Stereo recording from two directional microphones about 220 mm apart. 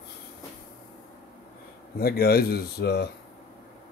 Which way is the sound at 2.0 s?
45° left (ahead or behind).